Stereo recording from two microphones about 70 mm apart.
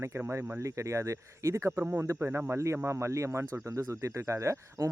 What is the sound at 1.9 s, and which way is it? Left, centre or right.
Speech, right.